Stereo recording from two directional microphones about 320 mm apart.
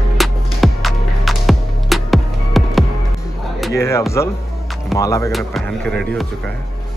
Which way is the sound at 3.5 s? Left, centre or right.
Centre.